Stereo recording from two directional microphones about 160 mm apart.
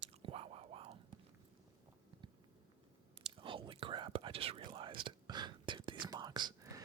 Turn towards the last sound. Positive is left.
turn(degrees=-25)  # may be behind; listen again after turning